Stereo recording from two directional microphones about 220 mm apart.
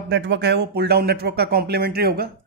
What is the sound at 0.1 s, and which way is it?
Speech, 50° right (ahead or behind).